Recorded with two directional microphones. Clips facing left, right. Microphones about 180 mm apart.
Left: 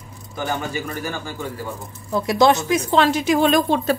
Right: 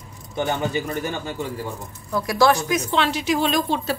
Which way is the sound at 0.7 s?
20° right (ahead or behind).